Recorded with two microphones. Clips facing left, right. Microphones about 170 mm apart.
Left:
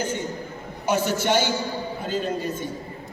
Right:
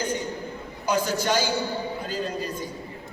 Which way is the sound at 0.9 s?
25° left (ahead or behind).